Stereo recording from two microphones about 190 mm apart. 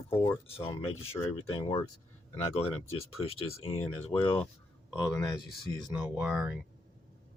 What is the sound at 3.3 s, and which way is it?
Speech, 30° left (ahead or behind).